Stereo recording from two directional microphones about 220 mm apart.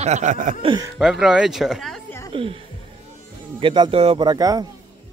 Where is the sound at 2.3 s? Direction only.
25° right (ahead or behind).